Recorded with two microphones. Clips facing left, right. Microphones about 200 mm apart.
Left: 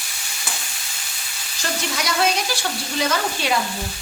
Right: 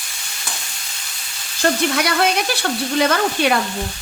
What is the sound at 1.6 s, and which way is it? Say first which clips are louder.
Frying: right 9 dB; 60° right (ahead or behind).